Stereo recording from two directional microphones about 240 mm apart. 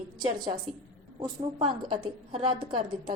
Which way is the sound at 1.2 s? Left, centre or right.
Centre.